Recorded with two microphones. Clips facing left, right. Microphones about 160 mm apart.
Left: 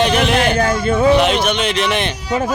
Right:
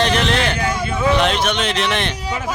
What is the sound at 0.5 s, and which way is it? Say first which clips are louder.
Speech: left 6 dB; 45° left (ahead or behind).